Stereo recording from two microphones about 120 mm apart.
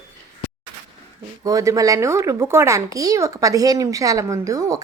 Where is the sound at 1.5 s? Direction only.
30° right (ahead or behind).